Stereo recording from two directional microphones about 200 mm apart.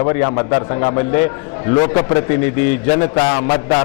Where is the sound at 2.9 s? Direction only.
25° left (ahead or behind).